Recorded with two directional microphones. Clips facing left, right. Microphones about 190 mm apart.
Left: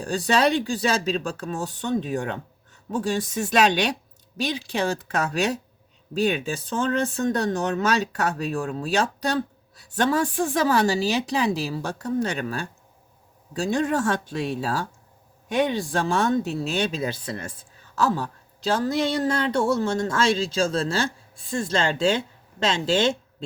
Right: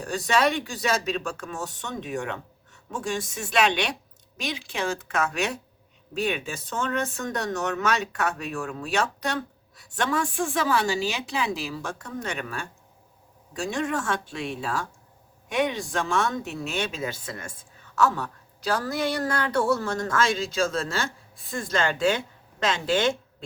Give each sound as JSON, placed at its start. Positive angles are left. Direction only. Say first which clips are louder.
{"t": 0.0, "sound": "speech", "louder": "left 2 dB", "side_deg": 30}